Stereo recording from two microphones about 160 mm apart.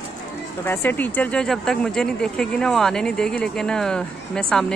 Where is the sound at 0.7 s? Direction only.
10° left (ahead or behind).